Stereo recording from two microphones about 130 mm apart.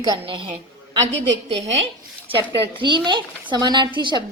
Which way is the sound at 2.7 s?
35° right (ahead or behind).